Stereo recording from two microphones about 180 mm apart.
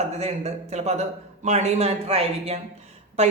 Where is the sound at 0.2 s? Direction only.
40° right (ahead or behind).